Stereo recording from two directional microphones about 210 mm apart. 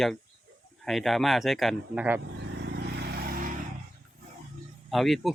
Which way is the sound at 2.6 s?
50° right (ahead or behind).